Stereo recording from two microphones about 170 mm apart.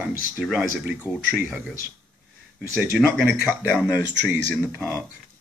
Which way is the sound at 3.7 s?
5° left (ahead or behind).